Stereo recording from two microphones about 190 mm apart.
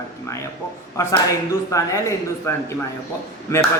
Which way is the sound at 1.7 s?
15° left (ahead or behind).